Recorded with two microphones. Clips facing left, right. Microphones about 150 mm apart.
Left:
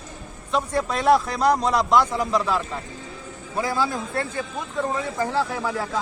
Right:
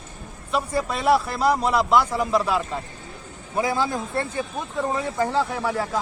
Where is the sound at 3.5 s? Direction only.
20° right (ahead or behind).